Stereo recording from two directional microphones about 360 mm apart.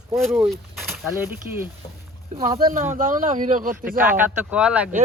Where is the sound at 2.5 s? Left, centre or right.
Right.